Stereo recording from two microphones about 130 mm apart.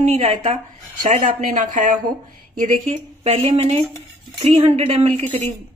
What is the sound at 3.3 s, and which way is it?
Speech, 50° right (ahead or behind).